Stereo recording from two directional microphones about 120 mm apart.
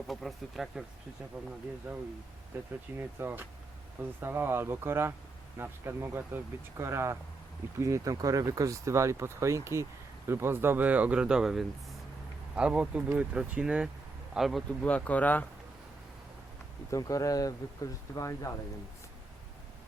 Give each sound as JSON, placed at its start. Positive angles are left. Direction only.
{"t": 0.1, "sound": "speech", "side_deg": 0}
{"t": 2.5, "sound": "speech", "side_deg": -20}
{"t": 16.9, "sound": "speech", "side_deg": 30}